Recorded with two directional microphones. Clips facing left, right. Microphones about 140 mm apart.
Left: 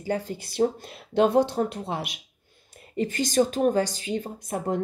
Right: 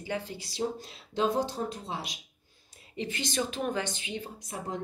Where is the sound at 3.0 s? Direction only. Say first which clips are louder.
Left 9 dB; 45° left (ahead or behind).